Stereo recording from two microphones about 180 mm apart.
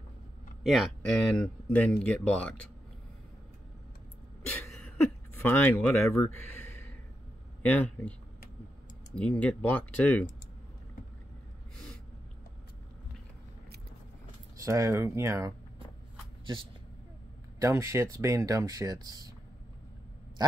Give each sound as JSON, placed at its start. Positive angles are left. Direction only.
{"t": 0.7, "sound": "speech", "side_deg": 0}
{"t": 4.5, "sound": "a sound", "side_deg": 10}
{"t": 7.6, "sound": "speech", "side_deg": 10}
{"t": 9.1, "sound": "speech", "side_deg": 5}
{"t": 14.6, "sound": "speech", "side_deg": -15}
{"t": 17.6, "sound": "speech", "side_deg": -15}